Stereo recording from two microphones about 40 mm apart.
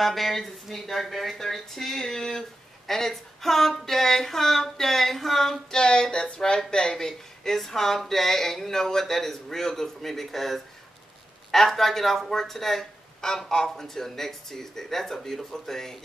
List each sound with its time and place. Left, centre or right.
0.0 s speech: centre
5.8 s speech: left